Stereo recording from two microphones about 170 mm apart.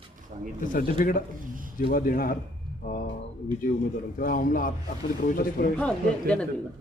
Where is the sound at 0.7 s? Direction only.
55° left (ahead or behind).